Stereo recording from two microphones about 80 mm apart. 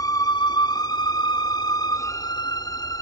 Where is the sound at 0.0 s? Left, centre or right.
Left.